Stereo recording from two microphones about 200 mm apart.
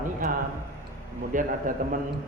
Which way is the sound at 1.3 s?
40° right (ahead or behind).